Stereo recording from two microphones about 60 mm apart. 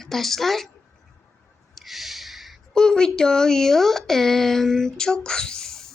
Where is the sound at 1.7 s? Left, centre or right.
Centre.